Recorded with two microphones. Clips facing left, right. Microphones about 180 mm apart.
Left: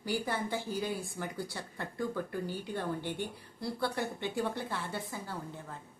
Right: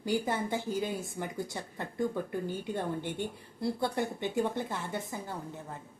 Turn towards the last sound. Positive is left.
turn(degrees=-20)  # may be behind; listen again after turning